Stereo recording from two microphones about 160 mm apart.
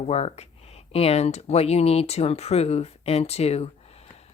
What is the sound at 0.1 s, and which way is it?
Speech, 40° left (ahead or behind).